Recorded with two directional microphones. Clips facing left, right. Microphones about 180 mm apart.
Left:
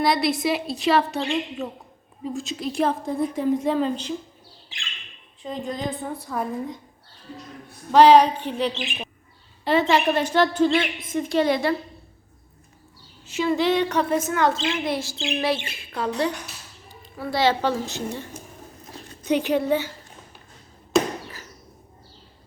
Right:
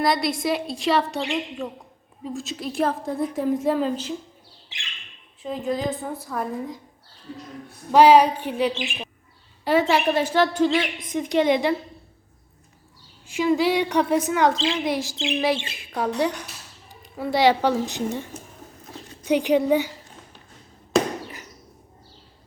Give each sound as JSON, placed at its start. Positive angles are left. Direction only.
{"t": 0.0, "sound": "a woman's voice", "side_deg": 0}
{"t": 5.4, "sound": "a woman's voice", "side_deg": -5}
{"t": 7.9, "sound": "a woman's voice", "side_deg": -10}
{"t": 13.2, "sound": "a woman's voice", "side_deg": -10}